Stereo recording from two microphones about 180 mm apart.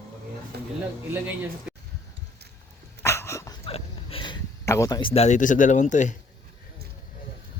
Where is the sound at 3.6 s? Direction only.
30° left (ahead or behind).